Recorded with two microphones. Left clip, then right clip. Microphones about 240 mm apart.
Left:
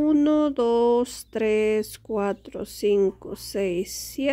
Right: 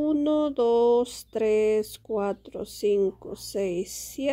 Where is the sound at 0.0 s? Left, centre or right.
Centre.